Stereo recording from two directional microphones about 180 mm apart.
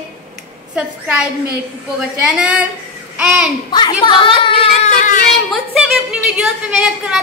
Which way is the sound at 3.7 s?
25° left (ahead or behind).